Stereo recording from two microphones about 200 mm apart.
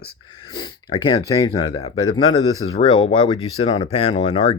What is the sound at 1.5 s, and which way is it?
Speech, 20° left (ahead or behind).